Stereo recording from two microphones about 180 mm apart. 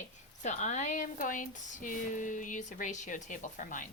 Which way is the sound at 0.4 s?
40° left (ahead or behind).